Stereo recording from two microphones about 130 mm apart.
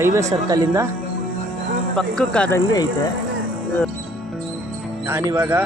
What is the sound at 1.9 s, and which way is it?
Speech, 5° left (ahead or behind).